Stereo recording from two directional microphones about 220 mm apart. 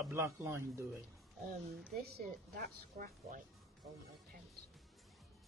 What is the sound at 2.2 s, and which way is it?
A woman's voice, 40° right (ahead or behind).